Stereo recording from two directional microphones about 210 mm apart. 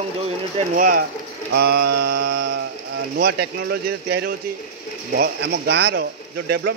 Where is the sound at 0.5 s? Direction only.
40° right (ahead or behind).